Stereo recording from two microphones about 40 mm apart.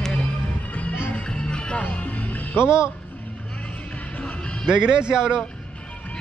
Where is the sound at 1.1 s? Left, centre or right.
Left.